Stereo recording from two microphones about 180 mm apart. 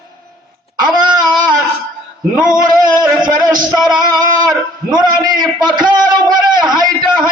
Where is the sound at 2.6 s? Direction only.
20° right (ahead or behind).